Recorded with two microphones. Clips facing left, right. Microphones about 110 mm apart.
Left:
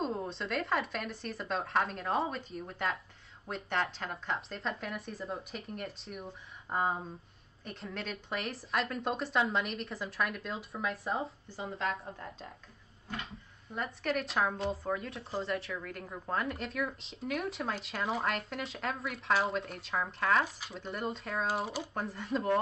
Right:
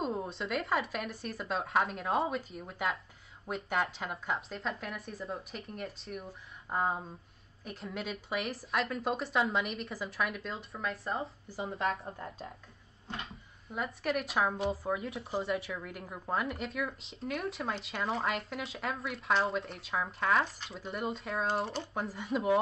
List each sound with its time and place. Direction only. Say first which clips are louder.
0.0 s speech: even; 5° right (ahead or behind)
13.1 s speech: even; 25° right (ahead or behind)
13.7 s speech: right 1 dB; centre (ahead or behind)